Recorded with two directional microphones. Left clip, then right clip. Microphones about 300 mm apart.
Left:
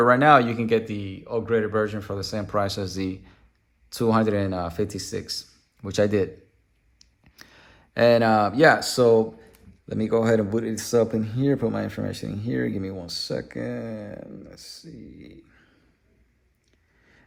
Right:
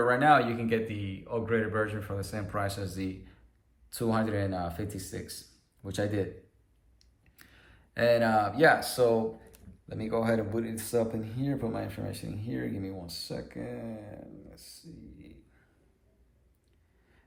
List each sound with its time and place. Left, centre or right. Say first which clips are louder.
0.1 s speech: left 5 dB; left
7.0 s a sound: left 9 dB; centre
9.9 s speech: left 8 dB; left